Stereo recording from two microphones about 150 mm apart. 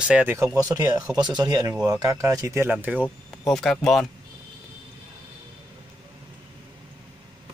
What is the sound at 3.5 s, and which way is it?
Speech, 5° left (ahead or behind).